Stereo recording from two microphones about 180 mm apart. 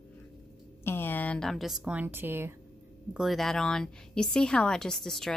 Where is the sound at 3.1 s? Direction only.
Centre (ahead or behind).